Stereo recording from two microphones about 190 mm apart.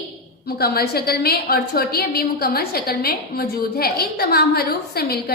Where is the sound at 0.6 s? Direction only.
55° left (ahead or behind).